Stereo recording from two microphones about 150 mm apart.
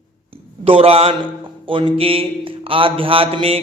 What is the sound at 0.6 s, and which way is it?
A man's voice, 40° right (ahead or behind).